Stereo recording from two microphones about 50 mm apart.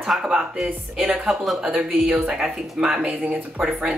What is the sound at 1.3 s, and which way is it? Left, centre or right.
Speech, centre.